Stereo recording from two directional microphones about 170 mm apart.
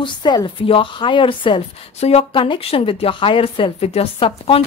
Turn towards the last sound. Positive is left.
turn(degrees=35)  # may be behind; listen again after turning